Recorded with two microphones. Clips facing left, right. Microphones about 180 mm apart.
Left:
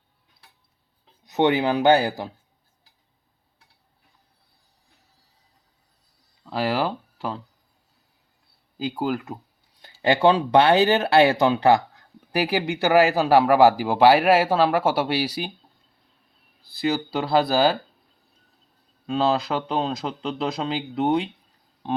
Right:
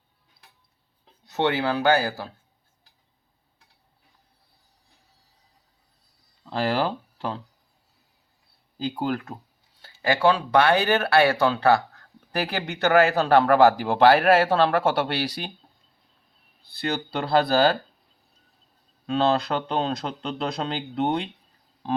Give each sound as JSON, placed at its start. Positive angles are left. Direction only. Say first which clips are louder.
{"t": 1.2, "sound": "speech", "louder": "left 4 dB", "side_deg": 15}
{"t": 6.4, "sound": "a sound", "louder": "even", "side_deg": 5}
{"t": 8.8, "sound": "speech", "louder": "left 1 dB", "side_deg": 5}
{"t": 10.0, "sound": "speech", "louder": "left 3 dB", "side_deg": 20}
{"t": 16.7, "sound": "speech", "louder": "left 4 dB", "side_deg": 5}
{"t": 19.0, "sound": "speech", "louder": "even", "side_deg": 0}
{"t": 21.8, "sound": "a sound", "louder": "even", "side_deg": 0}